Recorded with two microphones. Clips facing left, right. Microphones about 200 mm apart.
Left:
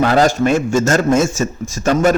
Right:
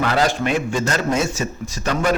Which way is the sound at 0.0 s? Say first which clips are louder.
Left 6 dB; 45° left (ahead or behind).